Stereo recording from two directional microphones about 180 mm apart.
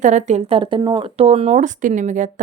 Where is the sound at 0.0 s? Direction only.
40° right (ahead or behind).